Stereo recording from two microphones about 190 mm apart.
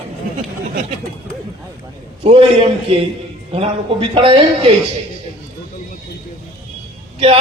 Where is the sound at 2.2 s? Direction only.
30° right (ahead or behind).